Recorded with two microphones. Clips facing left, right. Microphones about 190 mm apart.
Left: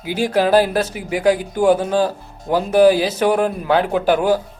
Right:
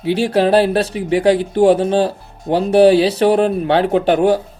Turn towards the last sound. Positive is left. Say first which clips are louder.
# right 2 dB
turn(degrees=-30)  # may be behind; listen again after turning